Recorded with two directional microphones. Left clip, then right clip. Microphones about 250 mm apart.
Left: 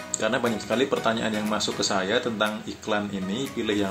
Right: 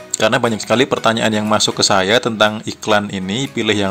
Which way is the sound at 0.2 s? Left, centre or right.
Right.